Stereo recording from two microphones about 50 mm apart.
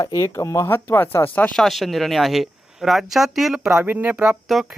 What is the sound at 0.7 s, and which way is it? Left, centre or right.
Speech, left.